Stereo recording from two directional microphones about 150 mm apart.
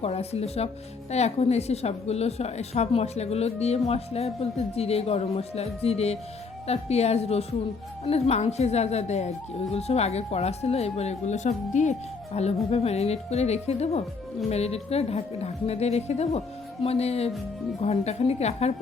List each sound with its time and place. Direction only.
0.0 s speech: 45° left (ahead or behind)